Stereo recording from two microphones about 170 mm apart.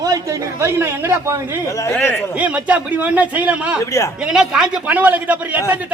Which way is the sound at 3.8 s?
20° left (ahead or behind).